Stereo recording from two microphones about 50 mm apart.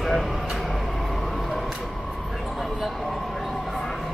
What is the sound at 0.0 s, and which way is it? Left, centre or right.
Vehicle, centre.